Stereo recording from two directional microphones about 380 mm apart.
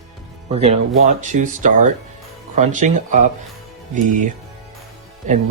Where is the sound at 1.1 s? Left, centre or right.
Centre.